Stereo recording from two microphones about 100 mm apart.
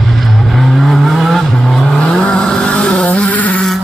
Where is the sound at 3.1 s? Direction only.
15° left (ahead or behind).